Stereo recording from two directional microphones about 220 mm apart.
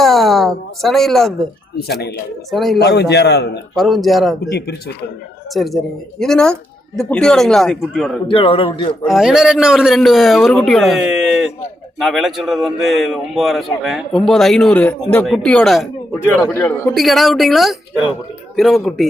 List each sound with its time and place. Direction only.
0.0 s a sound: centre (ahead or behind)
1.8 s a man's voice: 50° left (ahead or behind)
2.5 s a man's voice: centre (ahead or behind)
2.8 s a man's voice: 50° left (ahead or behind)
3.8 s a man's voice: centre (ahead or behind)
4.4 s a man's voice: 45° left (ahead or behind)
5.5 s a man's voice: centre (ahead or behind)
8.3 s a man's voice: 25° left (ahead or behind)
9.0 s a man's voice: centre (ahead or behind)
16.9 s a man's voice: centre (ahead or behind)